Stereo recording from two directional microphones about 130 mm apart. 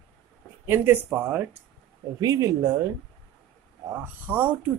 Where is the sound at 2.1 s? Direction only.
30° right (ahead or behind).